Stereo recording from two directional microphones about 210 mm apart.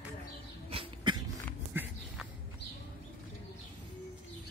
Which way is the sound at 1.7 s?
10° right (ahead or behind).